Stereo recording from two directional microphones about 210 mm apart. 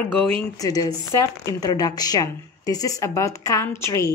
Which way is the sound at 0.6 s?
15° left (ahead or behind).